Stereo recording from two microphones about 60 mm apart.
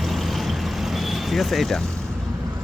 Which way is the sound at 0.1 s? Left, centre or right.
Centre.